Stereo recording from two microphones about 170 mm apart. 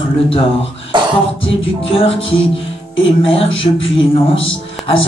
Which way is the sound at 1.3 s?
35° left (ahead or behind).